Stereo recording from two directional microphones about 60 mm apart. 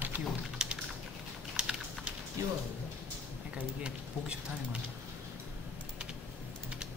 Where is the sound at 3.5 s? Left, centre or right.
Right.